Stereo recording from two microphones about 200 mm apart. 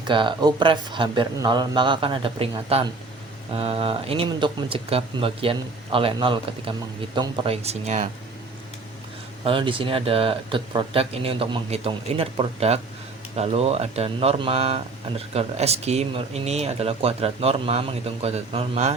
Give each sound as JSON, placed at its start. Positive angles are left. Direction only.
{"t": 0.1, "sound": "speech", "side_deg": -25}
{"t": 9.4, "sound": "speech", "side_deg": -25}